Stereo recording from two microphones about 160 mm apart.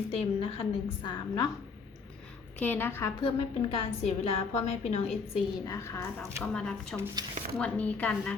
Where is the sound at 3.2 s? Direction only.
35° left (ahead or behind).